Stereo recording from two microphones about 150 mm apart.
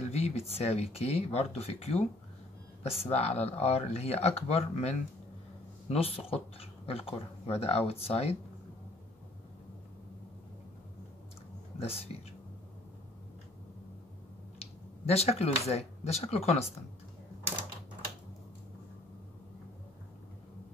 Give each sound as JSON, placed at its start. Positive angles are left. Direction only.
{"t": 0.0, "sound": "speech", "side_deg": 45}
{"t": 11.8, "sound": "speech", "side_deg": 40}
{"t": 14.6, "sound": "speech", "side_deg": 45}